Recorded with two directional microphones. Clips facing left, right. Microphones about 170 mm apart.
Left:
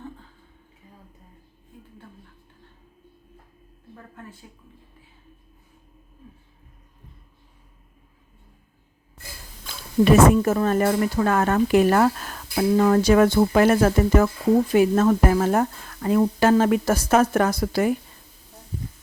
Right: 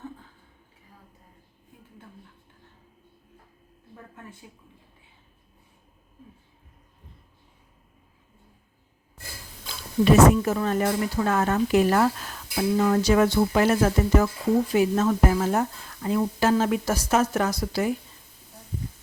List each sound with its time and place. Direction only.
10.0 s speech: 50° left (ahead or behind)